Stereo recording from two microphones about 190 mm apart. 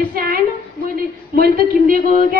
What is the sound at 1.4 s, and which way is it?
A woman's voice, 50° right (ahead or behind).